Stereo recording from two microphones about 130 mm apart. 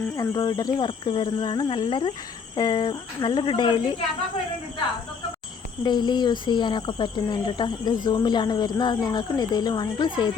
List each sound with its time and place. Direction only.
0.2 s speech: 30° left (ahead or behind)
5.8 s speech: 35° left (ahead or behind)